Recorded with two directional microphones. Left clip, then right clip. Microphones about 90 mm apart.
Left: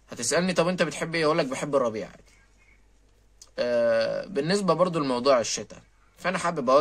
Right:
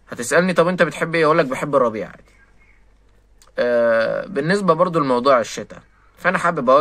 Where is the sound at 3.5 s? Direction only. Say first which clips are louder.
Right 7 dB; 20° left (ahead or behind).